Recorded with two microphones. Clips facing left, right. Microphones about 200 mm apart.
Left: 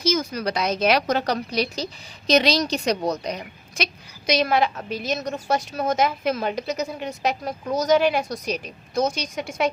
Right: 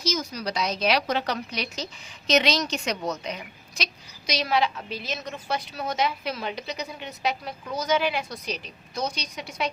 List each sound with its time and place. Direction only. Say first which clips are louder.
0.0 s a woman's voice: left 6 dB; 55° left (ahead or behind); by 3.4 s 35° left (ahead or behind)
3.8 s a woman's voice: left 6 dB; 55° left (ahead or behind)